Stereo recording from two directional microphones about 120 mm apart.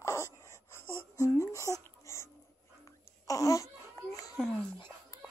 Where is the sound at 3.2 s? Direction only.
25° left (ahead or behind).